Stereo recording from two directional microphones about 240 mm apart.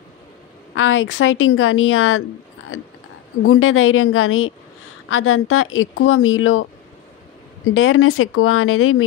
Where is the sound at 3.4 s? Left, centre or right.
Left.